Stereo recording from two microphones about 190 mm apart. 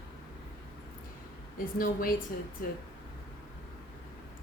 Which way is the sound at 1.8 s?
45° left (ahead or behind).